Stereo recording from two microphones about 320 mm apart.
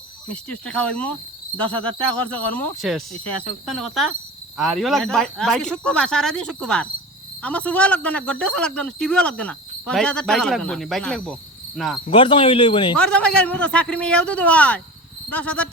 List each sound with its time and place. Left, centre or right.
0.3 s speech: centre
12.1 s a man's voice: centre
13.0 s speech: centre